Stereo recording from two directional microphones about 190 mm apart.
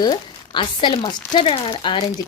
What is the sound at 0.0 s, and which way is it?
A woman's voice, 25° left (ahead or behind).